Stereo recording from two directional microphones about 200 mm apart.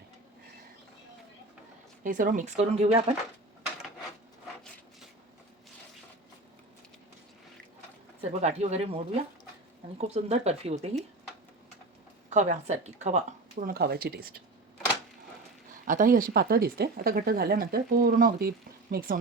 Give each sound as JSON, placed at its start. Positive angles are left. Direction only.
{"t": 2.0, "sound": "speech", "side_deg": -40}
{"t": 8.2, "sound": "speech", "side_deg": -35}
{"t": 10.0, "sound": "speech", "side_deg": -30}
{"t": 12.3, "sound": "speech", "side_deg": -35}
{"t": 15.9, "sound": "speech", "side_deg": -45}